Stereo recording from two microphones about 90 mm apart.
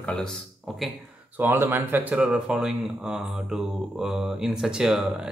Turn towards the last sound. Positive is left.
turn(degrees=-5)  # may be behind; listen again after turning